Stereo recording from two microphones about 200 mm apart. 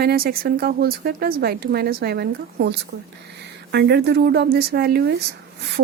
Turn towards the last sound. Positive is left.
turn(degrees=-50)  # may be behind; listen again after turning